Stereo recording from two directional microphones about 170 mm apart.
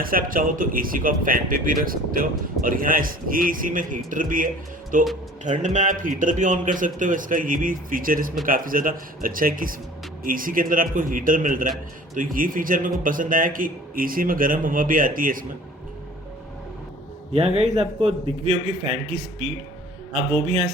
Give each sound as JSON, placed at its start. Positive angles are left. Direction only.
{"t": 0.0, "sound": "a man's voice", "side_deg": -55}
{"t": 17.3, "sound": "a man's voice", "side_deg": -40}